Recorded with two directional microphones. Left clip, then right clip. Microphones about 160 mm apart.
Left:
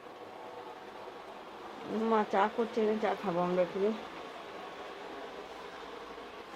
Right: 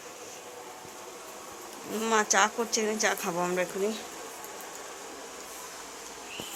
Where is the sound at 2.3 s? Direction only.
10° right (ahead or behind).